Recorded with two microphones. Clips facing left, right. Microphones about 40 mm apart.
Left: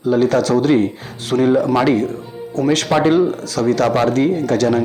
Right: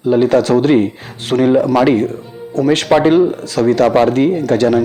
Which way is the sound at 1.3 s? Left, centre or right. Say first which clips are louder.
Right 2 dB; right.